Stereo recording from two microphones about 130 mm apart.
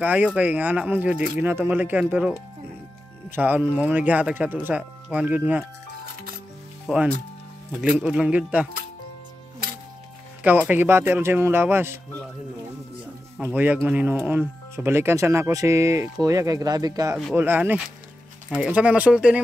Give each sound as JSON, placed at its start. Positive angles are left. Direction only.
{"t": 0.0, "sound": "speech", "side_deg": -10}
{"t": 6.9, "sound": "speech", "side_deg": -5}
{"t": 10.4, "sound": "speech", "side_deg": -15}
{"t": 13.4, "sound": "speech", "side_deg": -15}
{"t": 17.4, "sound": "speech", "side_deg": -15}